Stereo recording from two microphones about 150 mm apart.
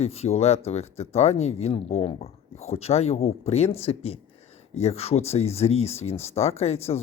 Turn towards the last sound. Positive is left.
turn(degrees=45)  # may be behind; listen again after turning